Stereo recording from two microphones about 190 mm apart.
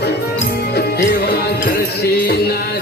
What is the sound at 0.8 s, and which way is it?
Music, 55° left (ahead or behind).